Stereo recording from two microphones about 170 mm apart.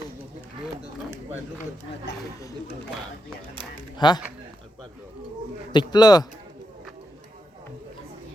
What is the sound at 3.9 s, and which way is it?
Speech, 25° left (ahead or behind).